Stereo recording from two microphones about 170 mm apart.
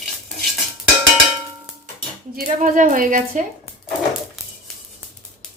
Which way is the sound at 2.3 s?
50° right (ahead or behind).